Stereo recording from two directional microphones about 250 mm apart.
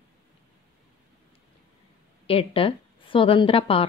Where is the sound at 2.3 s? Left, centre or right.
Left.